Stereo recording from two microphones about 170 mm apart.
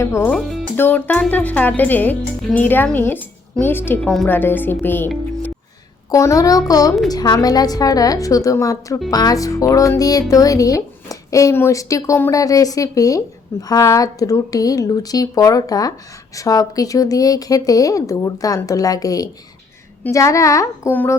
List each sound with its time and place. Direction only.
0.0 s speech: 15° left (ahead or behind)
0.3 s speech: centre (ahead or behind)
0.8 s speech: 10° left (ahead or behind)